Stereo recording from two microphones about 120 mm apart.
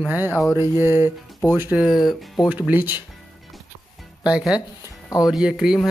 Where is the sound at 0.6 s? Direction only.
20° right (ahead or behind).